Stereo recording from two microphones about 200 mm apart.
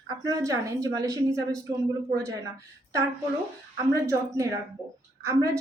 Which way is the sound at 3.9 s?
15° right (ahead or behind).